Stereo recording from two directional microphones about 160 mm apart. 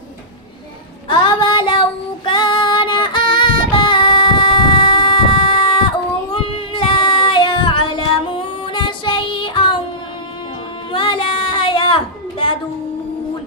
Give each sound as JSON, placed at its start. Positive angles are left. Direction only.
{"t": 1.0, "sound": "child singing", "side_deg": 30}
{"t": 10.9, "sound": "child singing", "side_deg": 30}